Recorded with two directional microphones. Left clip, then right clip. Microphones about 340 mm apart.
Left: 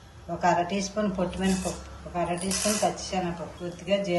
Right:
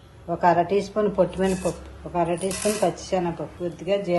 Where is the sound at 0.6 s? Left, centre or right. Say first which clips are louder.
Right 7 dB; centre.